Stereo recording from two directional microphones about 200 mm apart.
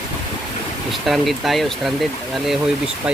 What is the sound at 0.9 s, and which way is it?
Speech, centre (ahead or behind).